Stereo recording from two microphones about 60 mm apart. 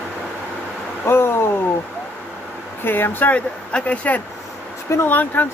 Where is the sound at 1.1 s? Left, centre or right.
Left.